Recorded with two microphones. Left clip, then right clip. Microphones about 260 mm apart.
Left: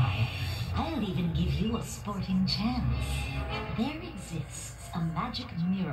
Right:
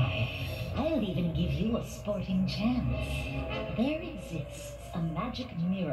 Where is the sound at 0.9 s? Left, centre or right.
Left.